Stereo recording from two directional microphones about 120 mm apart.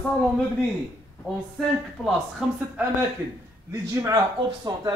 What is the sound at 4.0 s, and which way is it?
Speech, 30° right (ahead or behind).